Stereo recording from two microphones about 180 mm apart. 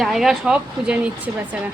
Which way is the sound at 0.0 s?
Centre (ahead or behind).